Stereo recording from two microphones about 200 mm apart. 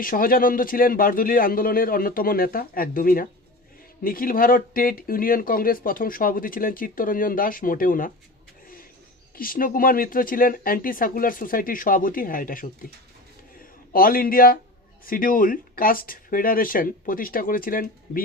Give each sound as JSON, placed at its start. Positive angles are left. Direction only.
{"t": 0.0, "sound": "speech", "side_deg": 45}
{"t": 9.3, "sound": "speech", "side_deg": 45}
{"t": 13.9, "sound": "speech", "side_deg": 45}